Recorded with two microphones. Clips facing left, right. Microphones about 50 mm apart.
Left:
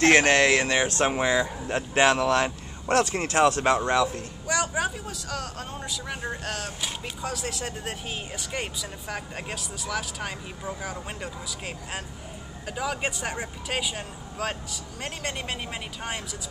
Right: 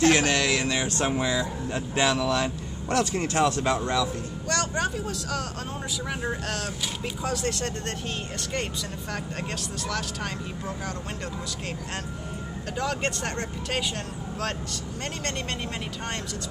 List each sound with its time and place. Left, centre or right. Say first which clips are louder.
0.0 s speech: left 3 dB; left
4.5 s speech: left 1 dB; centre
12.7 s speech: right 1 dB; centre